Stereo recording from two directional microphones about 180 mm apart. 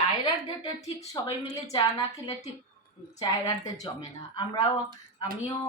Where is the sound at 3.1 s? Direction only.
20° left (ahead or behind).